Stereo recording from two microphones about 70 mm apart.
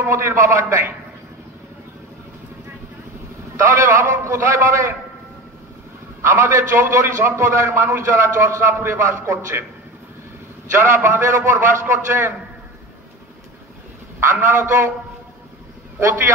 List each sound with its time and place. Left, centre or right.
0.0 s a man's voice: right
3.5 s a man's voice: right
6.2 s a man's voice: right
10.8 s a man's voice: right
14.2 s a man's voice: right